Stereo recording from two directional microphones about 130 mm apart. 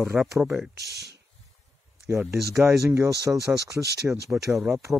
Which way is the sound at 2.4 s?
Centre (ahead or behind).